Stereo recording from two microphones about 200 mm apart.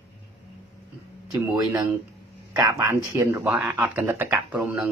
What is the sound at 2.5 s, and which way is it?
Speech, 20° right (ahead or behind).